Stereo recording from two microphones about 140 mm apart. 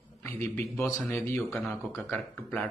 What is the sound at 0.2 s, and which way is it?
Speech, 15° left (ahead or behind).